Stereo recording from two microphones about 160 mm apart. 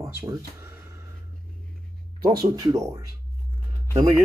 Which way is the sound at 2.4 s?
25° right (ahead or behind).